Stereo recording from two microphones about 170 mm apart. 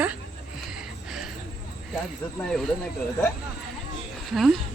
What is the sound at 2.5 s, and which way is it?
Speech, centre (ahead or behind).